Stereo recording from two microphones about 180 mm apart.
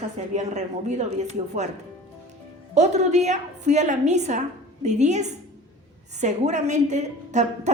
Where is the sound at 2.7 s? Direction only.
40° right (ahead or behind).